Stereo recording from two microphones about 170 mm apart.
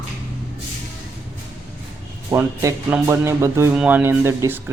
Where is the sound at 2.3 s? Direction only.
15° right (ahead or behind).